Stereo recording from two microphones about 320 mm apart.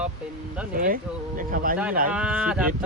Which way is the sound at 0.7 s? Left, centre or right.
Right.